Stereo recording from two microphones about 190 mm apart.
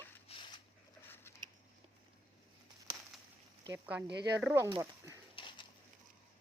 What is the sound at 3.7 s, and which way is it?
Speech, 5° right (ahead or behind).